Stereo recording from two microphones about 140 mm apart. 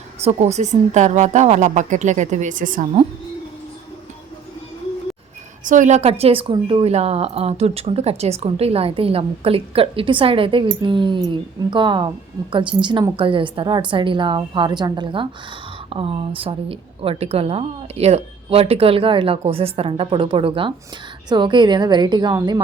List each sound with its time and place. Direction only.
0.2 s a woman's voice: 50° right (ahead or behind); by 2.8 s 70° right (ahead or behind)
5.6 s a woman's voice: 65° right (ahead or behind); by 22.6 s 25° right (ahead or behind)